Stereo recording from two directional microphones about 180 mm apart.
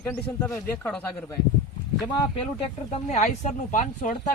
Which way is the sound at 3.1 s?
40° left (ahead or behind).